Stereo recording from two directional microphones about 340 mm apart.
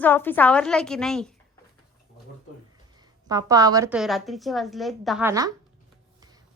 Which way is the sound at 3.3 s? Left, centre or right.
Centre.